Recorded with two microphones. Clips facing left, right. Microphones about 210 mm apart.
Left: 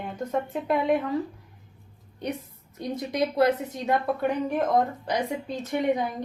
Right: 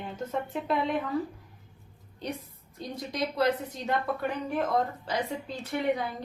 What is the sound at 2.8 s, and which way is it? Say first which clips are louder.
A woman's voice: left 6 dB; 25° left (ahead or behind).